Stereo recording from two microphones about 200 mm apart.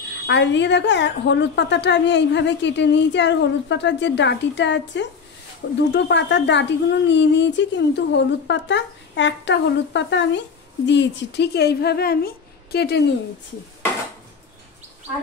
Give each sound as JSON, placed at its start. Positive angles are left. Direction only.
{"t": 0.3, "sound": "a woman's voice", "side_deg": 60}